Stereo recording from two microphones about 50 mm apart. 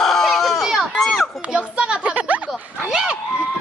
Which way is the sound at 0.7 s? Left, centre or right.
Centre.